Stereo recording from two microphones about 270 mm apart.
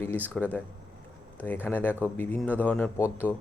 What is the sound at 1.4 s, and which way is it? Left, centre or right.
Speech, centre.